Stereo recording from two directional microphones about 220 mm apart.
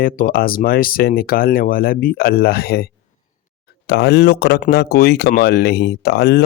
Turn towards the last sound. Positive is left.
turn(degrees=45)  # may be behind; listen again after turning